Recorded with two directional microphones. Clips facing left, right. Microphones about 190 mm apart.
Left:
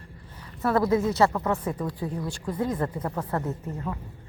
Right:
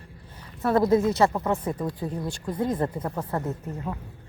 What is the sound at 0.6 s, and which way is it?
A woman's voice, 25° right (ahead or behind).